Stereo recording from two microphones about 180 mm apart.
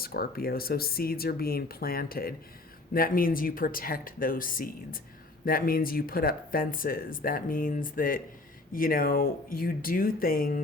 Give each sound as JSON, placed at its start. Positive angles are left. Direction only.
{"t": 0.0, "sound": "speech", "side_deg": 55}